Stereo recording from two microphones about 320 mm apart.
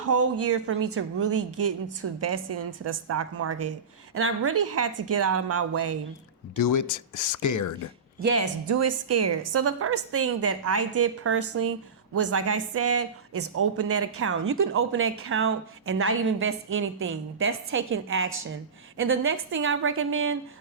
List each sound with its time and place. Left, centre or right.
0.0 s a woman's voice: right
6.6 s speech: left
8.2 s a woman's voice: right